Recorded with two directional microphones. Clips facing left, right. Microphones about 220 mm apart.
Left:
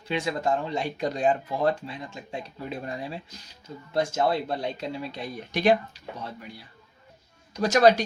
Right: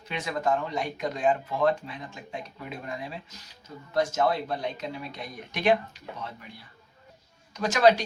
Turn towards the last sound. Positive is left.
turn(degrees=40)  # may be behind; listen again after turning